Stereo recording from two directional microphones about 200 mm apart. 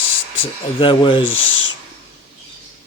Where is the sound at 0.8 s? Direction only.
25° left (ahead or behind).